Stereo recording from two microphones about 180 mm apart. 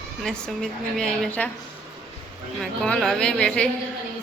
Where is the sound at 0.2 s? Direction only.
5° left (ahead or behind).